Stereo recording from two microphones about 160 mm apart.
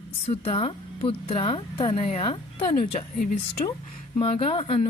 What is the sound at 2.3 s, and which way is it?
Speech, 35° left (ahead or behind).